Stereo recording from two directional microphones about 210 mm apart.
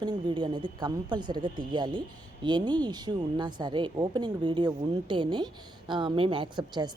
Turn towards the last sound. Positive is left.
turn(degrees=-20)  # may be behind; listen again after turning